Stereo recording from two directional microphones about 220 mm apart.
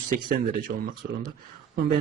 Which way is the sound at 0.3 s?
40° right (ahead or behind).